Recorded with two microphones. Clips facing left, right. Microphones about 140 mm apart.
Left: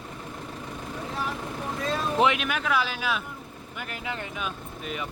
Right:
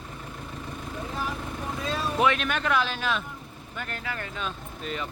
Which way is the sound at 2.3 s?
5° left (ahead or behind).